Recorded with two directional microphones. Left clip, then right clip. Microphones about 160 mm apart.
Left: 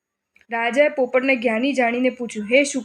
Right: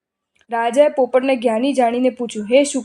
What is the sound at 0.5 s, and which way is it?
A woman's voice, 25° right (ahead or behind).